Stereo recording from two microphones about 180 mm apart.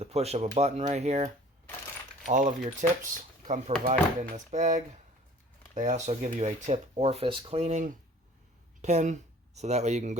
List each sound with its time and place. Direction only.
0.0 s speech: 35° right (ahead or behind)